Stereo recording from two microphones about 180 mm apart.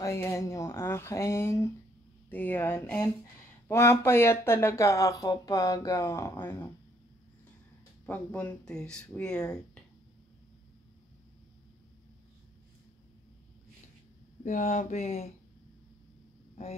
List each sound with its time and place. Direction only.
0.0 s speech: 15° left (ahead or behind)
8.1 s speech: 10° left (ahead or behind)
14.4 s speech: 40° left (ahead or behind)